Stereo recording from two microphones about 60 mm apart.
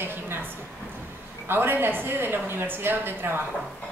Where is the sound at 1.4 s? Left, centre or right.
Right.